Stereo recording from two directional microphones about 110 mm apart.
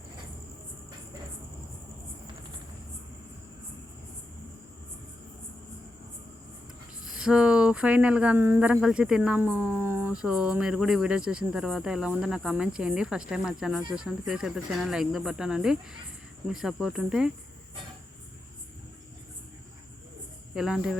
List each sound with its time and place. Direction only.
7.0 s speech: 5° right (ahead or behind); by 10.1 s 25° right (ahead or behind)
10.1 s speech: 5° right (ahead or behind)